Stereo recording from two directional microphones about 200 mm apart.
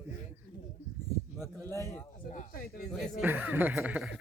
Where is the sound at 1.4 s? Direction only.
10° left (ahead or behind).